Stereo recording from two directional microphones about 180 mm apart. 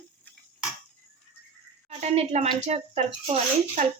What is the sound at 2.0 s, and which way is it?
A woman's voice, 35° right (ahead or behind).